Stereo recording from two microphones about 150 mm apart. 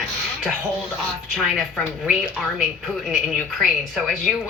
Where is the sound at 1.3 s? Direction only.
Centre (ahead or behind).